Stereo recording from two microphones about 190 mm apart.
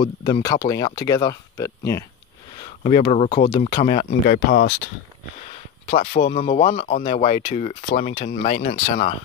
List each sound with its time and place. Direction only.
0.0 s speech: 20° left (ahead or behind)
3.1 s speech: 30° left (ahead or behind)
3.8 s speech: 40° left (ahead or behind)
5.9 s speech: 35° left (ahead or behind)